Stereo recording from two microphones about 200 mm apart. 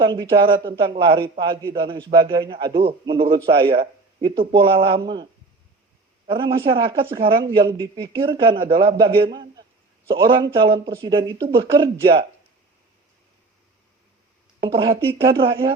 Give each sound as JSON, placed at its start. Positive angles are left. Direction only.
{"t": 0.0, "sound": "a man's voice", "side_deg": -25}
{"t": 14.7, "sound": "speech", "side_deg": -25}